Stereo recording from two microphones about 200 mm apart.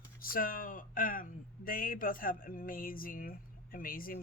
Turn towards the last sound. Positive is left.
turn(degrees=45)  # may be behind; listen again after turning